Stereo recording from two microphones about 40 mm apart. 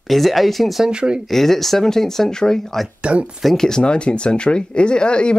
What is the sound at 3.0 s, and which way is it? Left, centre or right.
Speech, right.